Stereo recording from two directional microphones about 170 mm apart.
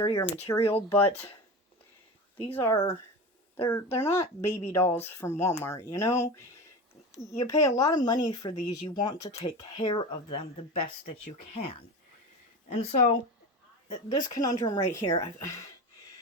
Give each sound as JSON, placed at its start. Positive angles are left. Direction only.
{"t": 0.0, "sound": "speech", "side_deg": 15}
{"t": 2.6, "sound": "speech", "side_deg": 15}
{"t": 7.3, "sound": "a woman's voice", "side_deg": 20}
{"t": 14.1, "sound": "a woman's voice", "side_deg": 20}